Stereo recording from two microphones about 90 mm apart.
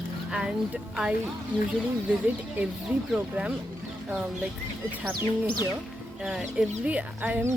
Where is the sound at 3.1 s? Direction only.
10° right (ahead or behind).